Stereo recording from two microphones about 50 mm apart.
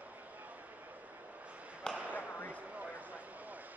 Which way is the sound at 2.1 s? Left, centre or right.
Left.